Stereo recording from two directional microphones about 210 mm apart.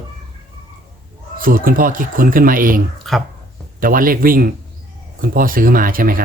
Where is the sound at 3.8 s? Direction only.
40° right (ahead or behind).